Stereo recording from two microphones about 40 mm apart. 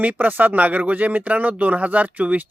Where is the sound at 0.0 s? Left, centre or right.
Right.